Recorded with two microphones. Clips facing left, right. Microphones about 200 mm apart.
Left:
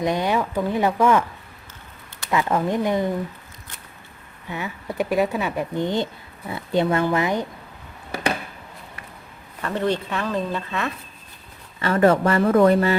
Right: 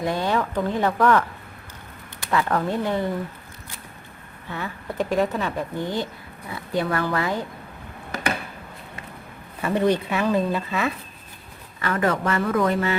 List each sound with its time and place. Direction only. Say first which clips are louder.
0.0 s speech: left 2 dB; 15° left (ahead or behind)
2.3 s speech: left 1 dB; 15° left (ahead or behind)
4.4 s speech: left 2 dB; 15° left (ahead or behind)
9.6 s speech: right 3 dB; 10° right (ahead or behind)
11.8 s speech: left 6 dB; 30° left (ahead or behind)